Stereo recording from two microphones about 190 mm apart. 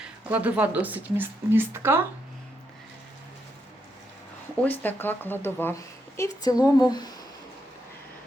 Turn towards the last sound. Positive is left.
turn(degrees=20)  # may be behind; listen again after turning